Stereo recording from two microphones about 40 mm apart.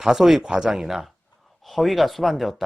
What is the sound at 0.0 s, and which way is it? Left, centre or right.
Speech, centre.